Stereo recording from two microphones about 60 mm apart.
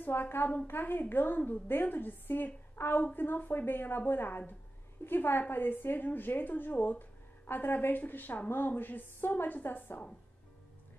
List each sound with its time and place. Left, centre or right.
0.0 s a woman's voice: left